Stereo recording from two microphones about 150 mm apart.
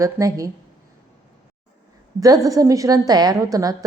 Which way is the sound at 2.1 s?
25° right (ahead or behind).